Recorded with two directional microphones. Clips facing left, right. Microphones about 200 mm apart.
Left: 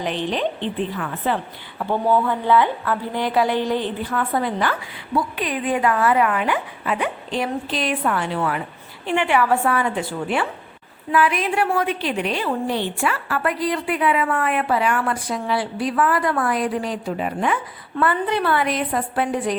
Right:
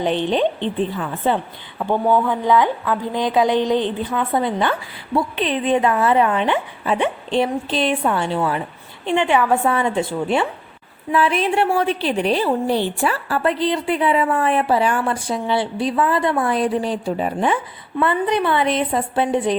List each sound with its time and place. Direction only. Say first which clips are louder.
0.0 s a woman's voice: right 5 dB; 30° right (ahead or behind)
2.2 s a woman's voice: right 1 dB; 15° right (ahead or behind); by 17.6 s 30° right (ahead or behind)
18.0 s a woman's voice: right 2 dB; 20° right (ahead or behind)